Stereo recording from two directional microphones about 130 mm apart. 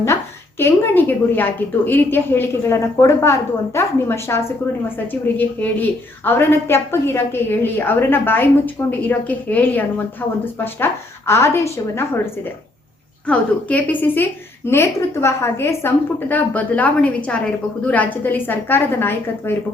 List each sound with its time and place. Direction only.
0.6 s a woman's voice: 15° left (ahead or behind)
6.2 s a woman's voice: 20° left (ahead or behind)